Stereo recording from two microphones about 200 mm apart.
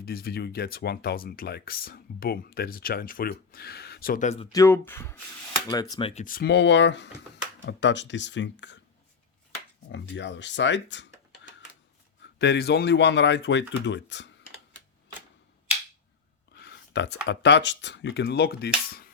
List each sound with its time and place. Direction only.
0.0 s speech: 50° left (ahead or behind)
4.5 s speech: 15° left (ahead or behind)
6.2 s speech: 50° left (ahead or behind)
9.9 s speech: 60° left (ahead or behind)
12.4 s speech: 55° left (ahead or behind)
16.6 s a sound: 55° left (ahead or behind)
17.2 s speech: 60° left (ahead or behind)